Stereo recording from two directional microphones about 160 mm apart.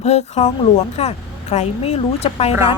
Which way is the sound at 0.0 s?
40° left (ahead or behind).